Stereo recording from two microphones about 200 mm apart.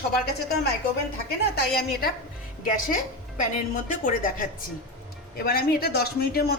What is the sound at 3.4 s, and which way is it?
A woman's voice, 40° left (ahead or behind).